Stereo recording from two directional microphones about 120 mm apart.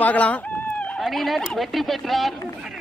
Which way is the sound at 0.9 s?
Centre (ahead or behind).